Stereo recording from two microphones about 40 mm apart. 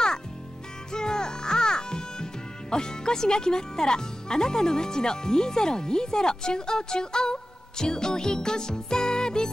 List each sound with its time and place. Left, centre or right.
0.9 s music: centre
2.7 s speech: centre